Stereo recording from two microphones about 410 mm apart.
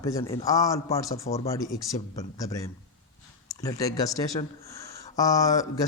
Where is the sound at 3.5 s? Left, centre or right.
Centre.